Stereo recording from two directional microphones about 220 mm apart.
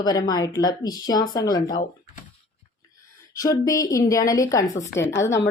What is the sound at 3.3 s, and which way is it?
Speech, 15° left (ahead or behind).